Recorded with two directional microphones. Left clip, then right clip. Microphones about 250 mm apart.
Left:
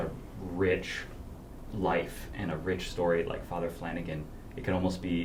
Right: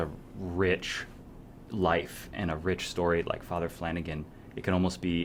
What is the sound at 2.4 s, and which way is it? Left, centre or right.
Speech, right.